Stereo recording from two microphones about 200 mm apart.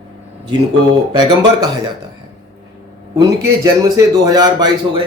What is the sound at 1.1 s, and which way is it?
Speech, 20° right (ahead or behind).